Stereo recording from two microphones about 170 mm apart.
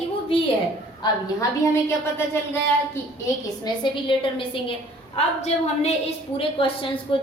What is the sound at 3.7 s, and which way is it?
A woman's voice, 30° left (ahead or behind).